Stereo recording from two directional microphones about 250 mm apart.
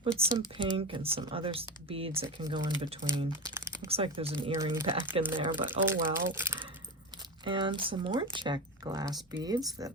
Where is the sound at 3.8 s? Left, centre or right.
Right.